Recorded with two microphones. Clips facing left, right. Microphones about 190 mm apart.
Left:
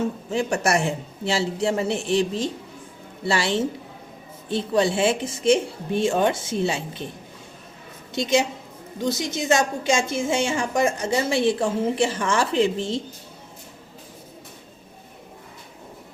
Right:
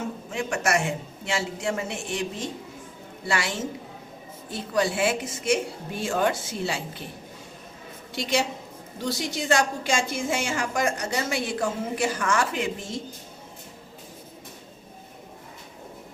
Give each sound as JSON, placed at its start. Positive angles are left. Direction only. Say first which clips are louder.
{"t": 0.3, "sound": "a woman's voice", "louder": "left 3 dB", "side_deg": 35}
{"t": 8.1, "sound": "a woman's voice", "louder": "left 5 dB", "side_deg": 20}